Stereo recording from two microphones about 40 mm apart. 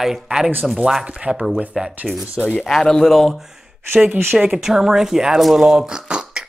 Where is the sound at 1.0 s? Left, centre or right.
Right.